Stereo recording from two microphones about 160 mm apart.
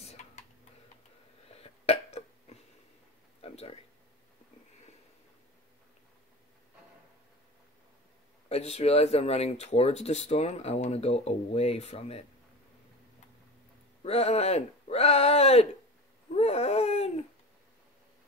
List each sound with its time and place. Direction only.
0.0 s tick-tock: 45° left (ahead or behind)
1.5 s burping: 40° left (ahead or behind)
3.3 s a sound: 40° left (ahead or behind)
8.5 s speech: 40° left (ahead or behind)
14.0 s speech: 40° left (ahead or behind)
16.3 s a sound: 40° left (ahead or behind)